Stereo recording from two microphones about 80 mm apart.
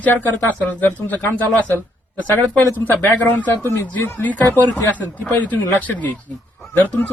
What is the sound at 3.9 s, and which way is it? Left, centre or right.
Speech, left.